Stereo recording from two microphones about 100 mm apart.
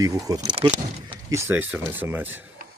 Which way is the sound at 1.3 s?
30° right (ahead or behind).